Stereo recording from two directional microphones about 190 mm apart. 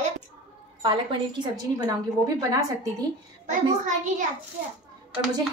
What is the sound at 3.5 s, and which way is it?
Speech, 40° right (ahead or behind).